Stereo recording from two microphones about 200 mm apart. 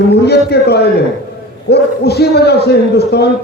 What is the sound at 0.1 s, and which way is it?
A man's voice, 55° left (ahead or behind).